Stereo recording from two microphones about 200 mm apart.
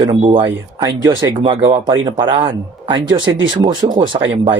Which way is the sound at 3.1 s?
75° right (ahead or behind).